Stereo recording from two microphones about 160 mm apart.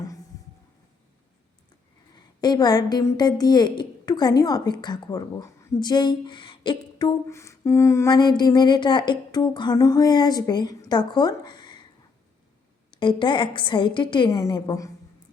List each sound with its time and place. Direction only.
2.1 s a woman's voice: 25° left (ahead or behind)
12.9 s a woman's voice: 30° left (ahead or behind)